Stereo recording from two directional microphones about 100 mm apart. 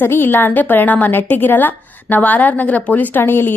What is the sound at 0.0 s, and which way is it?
Speech, 20° left (ahead or behind).